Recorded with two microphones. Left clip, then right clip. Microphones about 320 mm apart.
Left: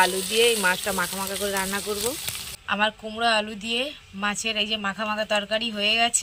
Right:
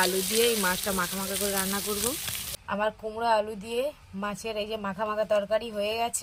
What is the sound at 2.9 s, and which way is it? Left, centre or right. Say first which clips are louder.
Speech: right 1 dB; right.